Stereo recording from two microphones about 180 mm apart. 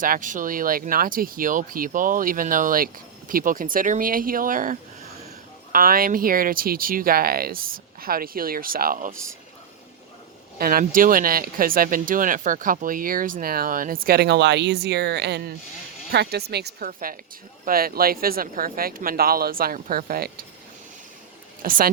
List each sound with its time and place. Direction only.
0.0 s speech: 45° right (ahead or behind)
10.6 s speech: 55° right (ahead or behind)
21.6 s speech: 50° right (ahead or behind)